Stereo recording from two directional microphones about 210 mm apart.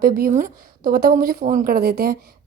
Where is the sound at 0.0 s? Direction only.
45° right (ahead or behind).